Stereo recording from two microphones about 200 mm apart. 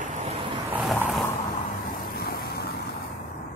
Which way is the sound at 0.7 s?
5° right (ahead or behind).